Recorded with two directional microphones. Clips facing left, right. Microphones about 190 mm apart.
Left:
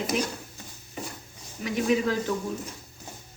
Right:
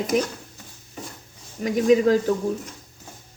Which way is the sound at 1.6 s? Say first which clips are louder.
Right 7 dB; 45° right (ahead or behind).